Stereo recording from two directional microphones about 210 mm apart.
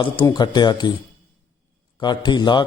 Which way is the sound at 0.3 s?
20° left (ahead or behind).